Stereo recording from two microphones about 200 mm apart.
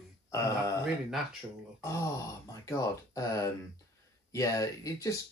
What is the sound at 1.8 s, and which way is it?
Speech, 15° left (ahead or behind).